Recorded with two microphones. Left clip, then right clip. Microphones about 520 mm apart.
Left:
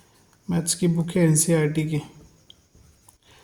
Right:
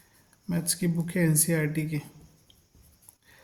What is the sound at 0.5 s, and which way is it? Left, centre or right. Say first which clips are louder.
Speech: left 6 dB; right.